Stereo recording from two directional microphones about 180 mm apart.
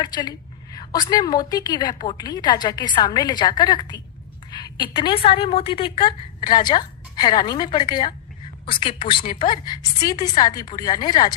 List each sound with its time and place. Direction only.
0.0 s a woman's voice: 25° left (ahead or behind)